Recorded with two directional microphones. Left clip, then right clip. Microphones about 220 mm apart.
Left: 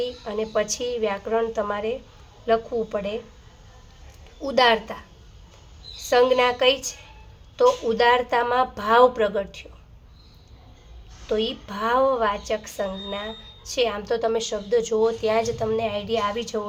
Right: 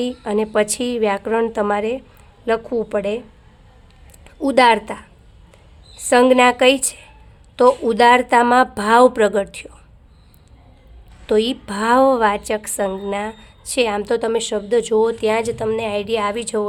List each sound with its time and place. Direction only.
0.0 s a woman's voice: 50° right (ahead or behind)
4.4 s a woman's voice: 50° right (ahead or behind)
6.1 s a woman's voice: 50° right (ahead or behind)
11.3 s a woman's voice: 55° right (ahead or behind)